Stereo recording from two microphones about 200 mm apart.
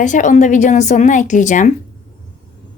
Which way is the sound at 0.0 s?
40° left (ahead or behind).